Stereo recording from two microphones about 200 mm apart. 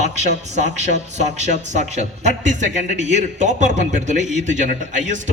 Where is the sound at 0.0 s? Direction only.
35° right (ahead or behind).